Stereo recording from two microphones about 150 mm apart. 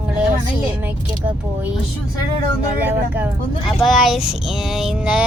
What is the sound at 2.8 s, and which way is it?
Speech, 10° right (ahead or behind).